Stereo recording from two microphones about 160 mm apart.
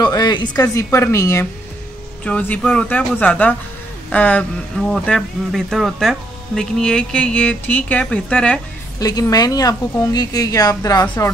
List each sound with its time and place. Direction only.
0.0 s a woman's voice: 25° left (ahead or behind); by 8.5 s 5° left (ahead or behind)
9.0 s a woman's voice: 25° left (ahead or behind)